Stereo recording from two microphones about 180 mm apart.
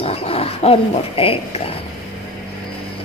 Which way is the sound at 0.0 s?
35° left (ahead or behind).